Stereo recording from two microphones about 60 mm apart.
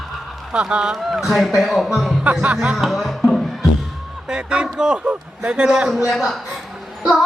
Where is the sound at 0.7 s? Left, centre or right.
Centre.